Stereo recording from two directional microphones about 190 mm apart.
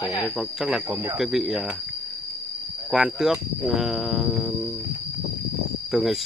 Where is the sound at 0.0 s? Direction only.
20° left (ahead or behind).